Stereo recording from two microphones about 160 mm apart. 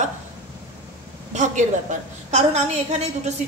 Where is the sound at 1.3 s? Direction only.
50° right (ahead or behind).